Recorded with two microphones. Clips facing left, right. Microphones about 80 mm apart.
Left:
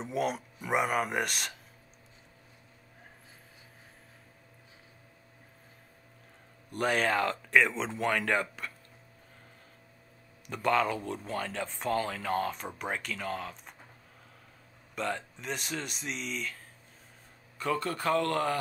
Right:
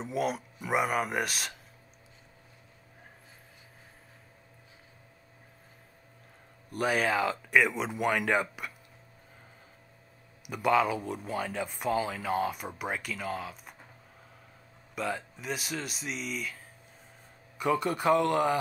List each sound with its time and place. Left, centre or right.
0.0 s speech: centre
6.7 s speech: centre
10.4 s speech: centre
15.0 s speech: centre
17.6 s speech: centre